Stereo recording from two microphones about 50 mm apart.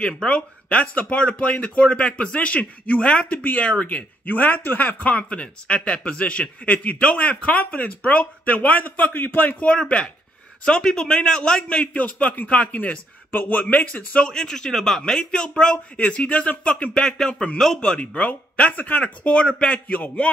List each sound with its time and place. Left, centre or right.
0.0 s a man's voice: centre
3.3 s a man's voice: left
9.7 s a man's voice: left
14.2 s a man's voice: centre